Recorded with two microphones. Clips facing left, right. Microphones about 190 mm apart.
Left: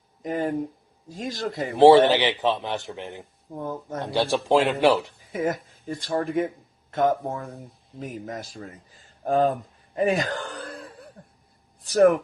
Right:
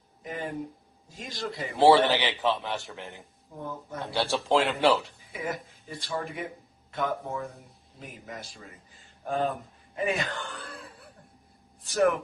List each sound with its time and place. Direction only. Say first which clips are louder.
0.2 s a sound: left 9 dB; 40° left (ahead or behind)
1.1 s a man's voice: left 6 dB; 45° left (ahead or behind)
1.7 s speech: left 6 dB; 20° left (ahead or behind)
5.3 s speech: left 8 dB; 50° left (ahead or behind)